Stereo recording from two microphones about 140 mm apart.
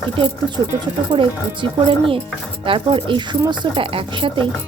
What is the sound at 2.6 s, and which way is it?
Speech, 35° right (ahead or behind).